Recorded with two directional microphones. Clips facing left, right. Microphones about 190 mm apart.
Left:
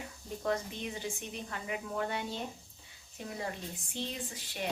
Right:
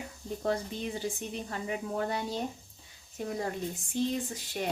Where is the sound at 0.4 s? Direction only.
35° right (ahead or behind).